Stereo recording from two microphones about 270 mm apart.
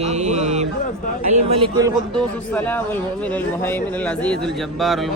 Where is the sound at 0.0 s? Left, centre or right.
Right.